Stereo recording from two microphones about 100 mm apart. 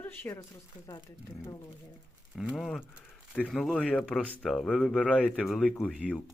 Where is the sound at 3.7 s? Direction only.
10° left (ahead or behind).